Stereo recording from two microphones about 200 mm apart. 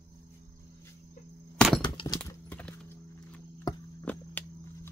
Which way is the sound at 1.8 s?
20° left (ahead or behind).